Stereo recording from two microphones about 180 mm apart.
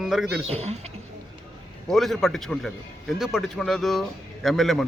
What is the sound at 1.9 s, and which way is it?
A man's voice, centre (ahead or behind).